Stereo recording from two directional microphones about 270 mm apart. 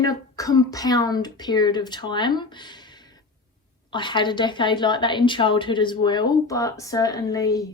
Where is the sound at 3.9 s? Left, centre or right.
Centre.